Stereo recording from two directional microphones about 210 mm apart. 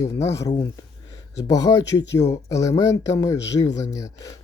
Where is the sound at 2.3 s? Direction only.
15° left (ahead or behind).